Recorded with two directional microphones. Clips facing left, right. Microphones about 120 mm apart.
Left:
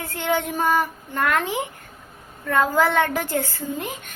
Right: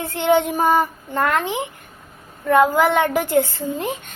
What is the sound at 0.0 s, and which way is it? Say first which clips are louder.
A child's voice: right 7 dB; 25° right (ahead or behind).